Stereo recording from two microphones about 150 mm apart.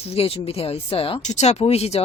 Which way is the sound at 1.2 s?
50° left (ahead or behind).